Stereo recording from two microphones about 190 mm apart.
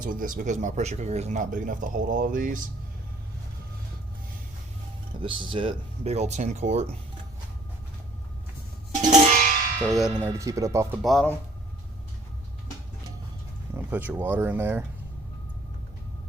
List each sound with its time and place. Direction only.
0.0 s speech: 45° right (ahead or behind)
5.2 s speech: 25° right (ahead or behind)
9.0 s music: 45° right (ahead or behind)
9.9 s speech: centre (ahead or behind)
10.2 s speech: 15° right (ahead or behind)
11.0 s speech: centre (ahead or behind)
13.7 s speech: 10° right (ahead or behind)